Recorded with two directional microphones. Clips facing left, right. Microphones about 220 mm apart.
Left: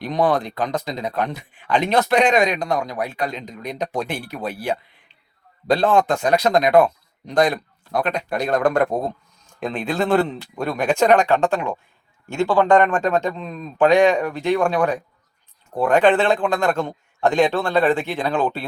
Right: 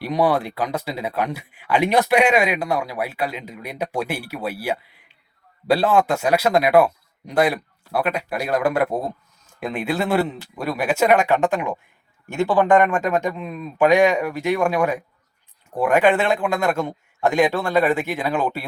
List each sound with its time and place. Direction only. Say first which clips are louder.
0.0 s speech: even; 10° right (ahead or behind)